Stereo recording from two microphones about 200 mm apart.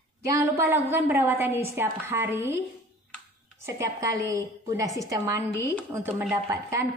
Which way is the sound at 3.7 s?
15° right (ahead or behind).